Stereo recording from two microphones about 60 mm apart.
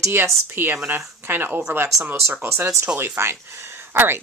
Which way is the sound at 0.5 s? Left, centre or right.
Right.